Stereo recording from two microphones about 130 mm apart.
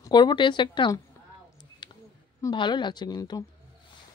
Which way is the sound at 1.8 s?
35° left (ahead or behind).